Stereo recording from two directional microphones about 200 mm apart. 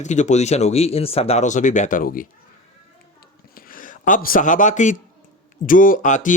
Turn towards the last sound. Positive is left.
turn(degrees=40)  # may be behind; listen again after turning